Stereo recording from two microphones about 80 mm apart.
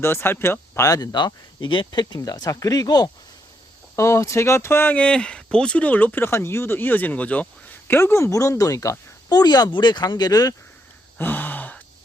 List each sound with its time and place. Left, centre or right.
0.0 s speech: left
0.9 s speech: left
1.1 s speech: left
3.9 s speech: left; by 7.4 s centre
7.9 s speech: left
11.2 s gasp: left